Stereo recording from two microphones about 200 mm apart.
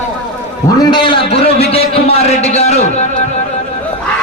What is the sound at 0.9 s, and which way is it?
A man's voice, 25° left (ahead or behind).